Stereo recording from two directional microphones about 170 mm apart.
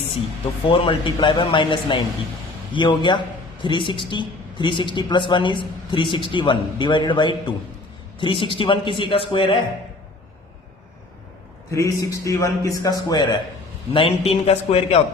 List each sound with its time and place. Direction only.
0.7 s speech: 30° left (ahead or behind)
11.7 s speech: 20° left (ahead or behind); by 15.0 s 35° left (ahead or behind)